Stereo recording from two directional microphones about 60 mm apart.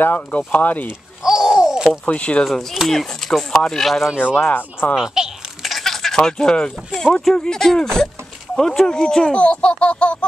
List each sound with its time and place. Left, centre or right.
0.0 s speech: left
1.2 s a sound: centre
2.0 s speech: left
2.9 s speech: centre
4.5 s speech: left
4.9 s a sound: centre
7.0 s speech: centre